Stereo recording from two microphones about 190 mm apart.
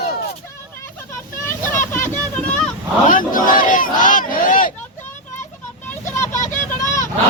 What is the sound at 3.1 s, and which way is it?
Battle cry, 45° left (ahead or behind).